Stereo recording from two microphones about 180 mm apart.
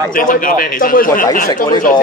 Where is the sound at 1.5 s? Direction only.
25° left (ahead or behind).